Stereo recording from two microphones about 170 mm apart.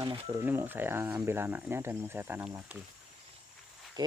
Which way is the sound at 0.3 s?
15° right (ahead or behind).